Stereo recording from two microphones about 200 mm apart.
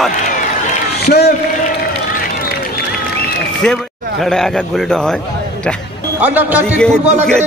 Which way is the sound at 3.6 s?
Centre (ahead or behind).